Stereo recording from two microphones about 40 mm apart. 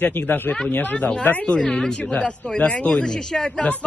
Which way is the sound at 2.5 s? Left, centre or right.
Left.